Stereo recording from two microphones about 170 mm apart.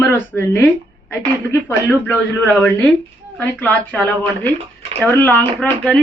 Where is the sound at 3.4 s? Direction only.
10° left (ahead or behind).